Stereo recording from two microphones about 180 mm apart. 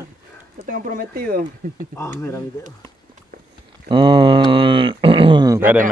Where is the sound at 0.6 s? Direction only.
50° right (ahead or behind).